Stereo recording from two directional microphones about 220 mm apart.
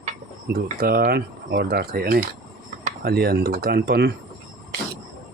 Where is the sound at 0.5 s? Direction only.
40° right (ahead or behind).